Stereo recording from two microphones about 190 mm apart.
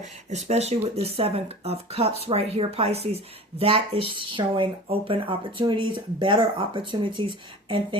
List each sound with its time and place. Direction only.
0.0 s speech: 35° right (ahead or behind)